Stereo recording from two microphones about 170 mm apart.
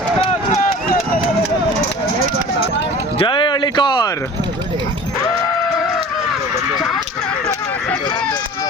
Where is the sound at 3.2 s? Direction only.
30° left (ahead or behind).